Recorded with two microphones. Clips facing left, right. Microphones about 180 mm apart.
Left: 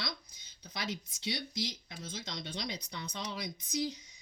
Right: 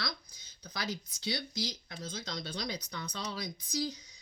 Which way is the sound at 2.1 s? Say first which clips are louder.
Right 1 dB; 25° left (ahead or behind).